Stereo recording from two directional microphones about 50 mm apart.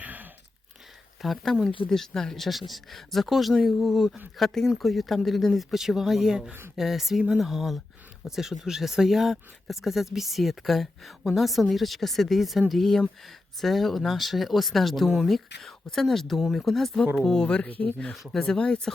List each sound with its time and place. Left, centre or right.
0.0 s a sound: right
1.2 s speech: centre
15.6 s speech: centre
17.2 s speech: centre
17.7 s speech: left
18.3 s speech: centre